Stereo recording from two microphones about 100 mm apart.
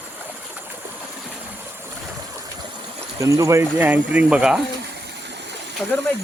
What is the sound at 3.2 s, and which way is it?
Speech, 35° right (ahead or behind).